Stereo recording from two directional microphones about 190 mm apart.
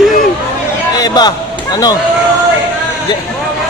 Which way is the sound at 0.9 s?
20° left (ahead or behind).